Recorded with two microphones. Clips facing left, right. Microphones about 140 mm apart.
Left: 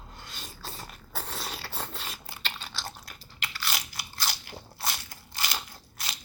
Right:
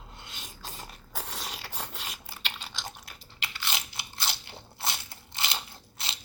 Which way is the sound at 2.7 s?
15° right (ahead or behind).